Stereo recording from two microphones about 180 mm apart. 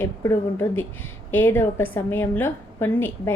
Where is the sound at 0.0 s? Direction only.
15° left (ahead or behind).